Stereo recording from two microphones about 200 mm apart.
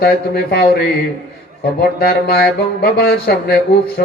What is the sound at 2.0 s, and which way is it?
Speech, 50° left (ahead or behind).